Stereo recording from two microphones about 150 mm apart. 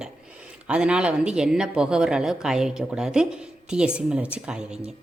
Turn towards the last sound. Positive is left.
turn(degrees=-5)  # may be behind; listen again after turning